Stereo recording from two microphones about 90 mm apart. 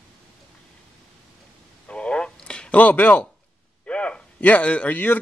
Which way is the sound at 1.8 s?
15° left (ahead or behind).